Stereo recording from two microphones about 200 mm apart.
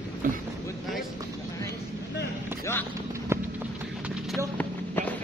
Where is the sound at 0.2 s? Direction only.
45° right (ahead or behind).